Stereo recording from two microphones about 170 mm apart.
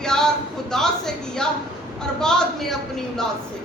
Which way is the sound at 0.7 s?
5° left (ahead or behind).